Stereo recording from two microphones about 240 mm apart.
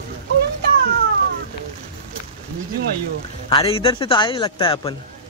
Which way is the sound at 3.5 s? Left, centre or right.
Left.